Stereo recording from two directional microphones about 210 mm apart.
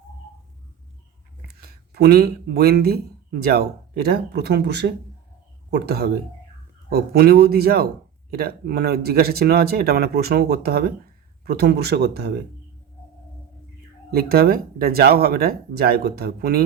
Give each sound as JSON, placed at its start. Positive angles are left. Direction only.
{"t": 1.5, "sound": "speech", "side_deg": -50}
{"t": 14.1, "sound": "speech", "side_deg": -45}